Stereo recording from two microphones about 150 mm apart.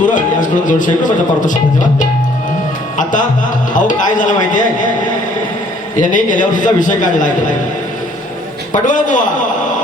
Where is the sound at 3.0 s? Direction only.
60° left (ahead or behind).